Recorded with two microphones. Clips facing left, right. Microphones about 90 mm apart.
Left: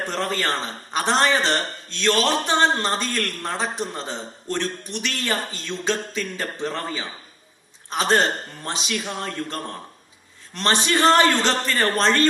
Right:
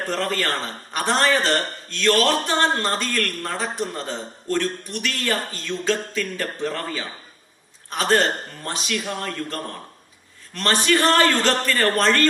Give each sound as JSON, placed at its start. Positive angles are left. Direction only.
{"t": 0.0, "sound": "a man's voice", "side_deg": 20}